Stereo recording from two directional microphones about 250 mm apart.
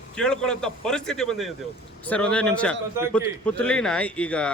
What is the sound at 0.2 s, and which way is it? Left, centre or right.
Speech, centre.